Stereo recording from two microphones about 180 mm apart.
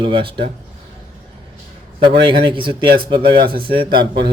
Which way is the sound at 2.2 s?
25° right (ahead or behind).